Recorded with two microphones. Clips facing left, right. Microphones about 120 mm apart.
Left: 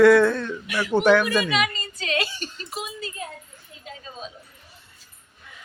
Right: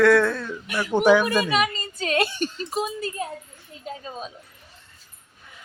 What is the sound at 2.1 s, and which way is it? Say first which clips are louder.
Speech: right 4 dB; 55° right (ahead or behind).